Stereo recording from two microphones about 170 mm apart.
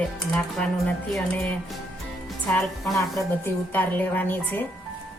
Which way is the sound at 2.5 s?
15° left (ahead or behind).